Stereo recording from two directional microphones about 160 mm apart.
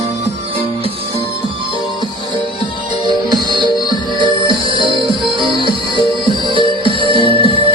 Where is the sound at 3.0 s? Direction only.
30° right (ahead or behind).